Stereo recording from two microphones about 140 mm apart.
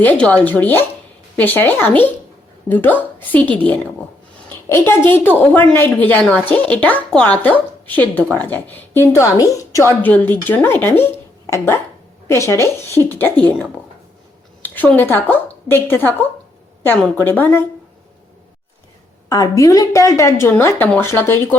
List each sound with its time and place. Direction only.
0.0 s speech: 10° left (ahead or behind)
19.3 s a woman's voice: 25° left (ahead or behind)